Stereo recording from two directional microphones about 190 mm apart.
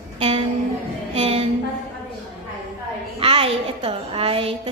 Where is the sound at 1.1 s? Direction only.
35° right (ahead or behind).